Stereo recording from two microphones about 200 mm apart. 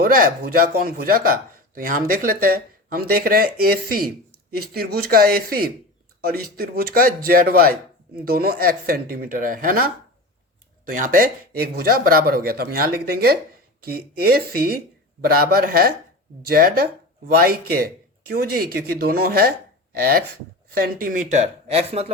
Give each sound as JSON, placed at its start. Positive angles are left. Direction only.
{"t": 0.0, "sound": "a man's voice", "side_deg": -45}